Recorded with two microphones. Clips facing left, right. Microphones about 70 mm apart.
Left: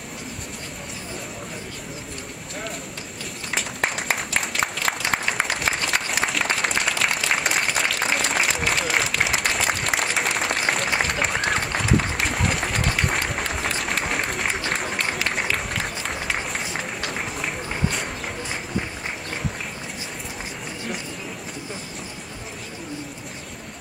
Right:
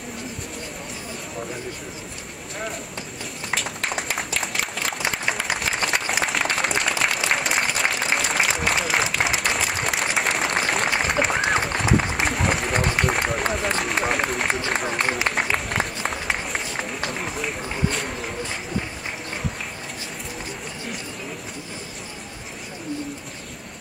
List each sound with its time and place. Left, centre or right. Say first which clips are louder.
4.4 s applause: left 1 dB; centre
15.3 s a sound: right 2 dB; centre
16.5 s run: right 1 dB; centre